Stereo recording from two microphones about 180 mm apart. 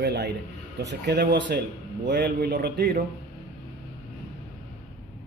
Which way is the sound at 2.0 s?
65° right (ahead or behind).